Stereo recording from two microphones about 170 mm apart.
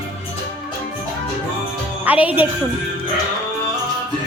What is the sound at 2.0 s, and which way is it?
Music, 10° right (ahead or behind).